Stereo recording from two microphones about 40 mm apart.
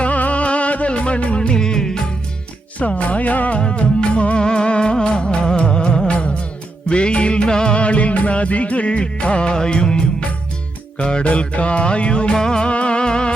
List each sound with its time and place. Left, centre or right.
0.0 s music: left
1.4 s music: centre
2.7 s music: left
3.6 s music: left
4.4 s music: centre